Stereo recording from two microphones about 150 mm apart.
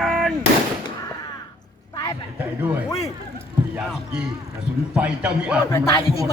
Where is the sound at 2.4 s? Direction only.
10° right (ahead or behind).